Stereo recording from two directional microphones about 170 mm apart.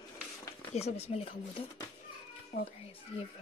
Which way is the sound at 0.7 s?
35° left (ahead or behind).